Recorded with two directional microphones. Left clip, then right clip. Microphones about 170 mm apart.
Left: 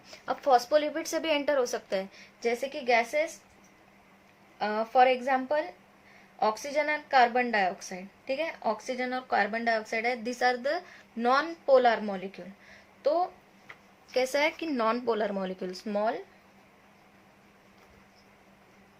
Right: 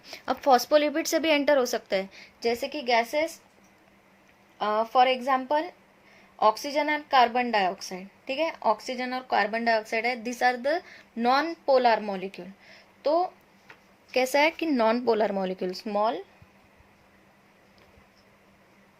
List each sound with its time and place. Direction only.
0.0 s speech: 45° right (ahead or behind)
4.6 s a woman's voice: 40° right (ahead or behind)